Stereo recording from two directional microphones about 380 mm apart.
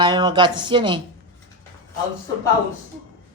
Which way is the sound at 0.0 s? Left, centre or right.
Centre.